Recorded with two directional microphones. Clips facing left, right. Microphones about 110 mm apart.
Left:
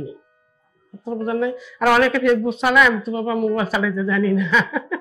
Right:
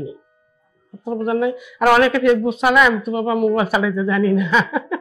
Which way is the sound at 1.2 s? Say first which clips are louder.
Right 3 dB; 15° right (ahead or behind).